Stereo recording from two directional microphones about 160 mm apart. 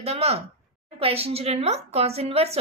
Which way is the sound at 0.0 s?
40° right (ahead or behind).